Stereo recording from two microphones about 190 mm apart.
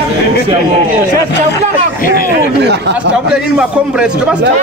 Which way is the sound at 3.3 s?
5° right (ahead or behind).